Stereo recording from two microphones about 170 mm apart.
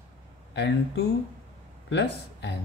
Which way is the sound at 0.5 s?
90° left.